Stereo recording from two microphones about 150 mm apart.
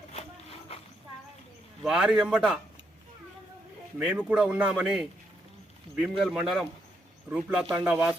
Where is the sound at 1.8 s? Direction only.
5° right (ahead or behind).